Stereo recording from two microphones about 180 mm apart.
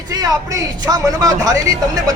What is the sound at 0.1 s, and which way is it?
Speech, 20° right (ahead or behind).